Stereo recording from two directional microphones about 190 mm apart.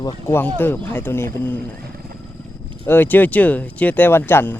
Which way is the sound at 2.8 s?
10° left (ahead or behind).